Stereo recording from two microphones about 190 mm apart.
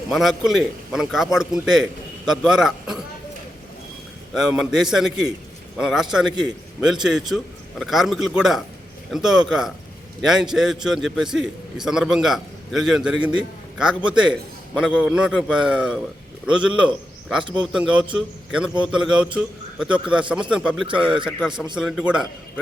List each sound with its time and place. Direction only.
0.1 s a man's voice: centre (ahead or behind)
4.4 s a man's voice: centre (ahead or behind)
17.4 s speech: 25° right (ahead or behind)
17.7 s a man's voice: 5° right (ahead or behind)